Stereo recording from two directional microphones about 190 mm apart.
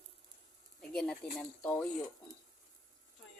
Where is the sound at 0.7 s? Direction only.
5° left (ahead or behind).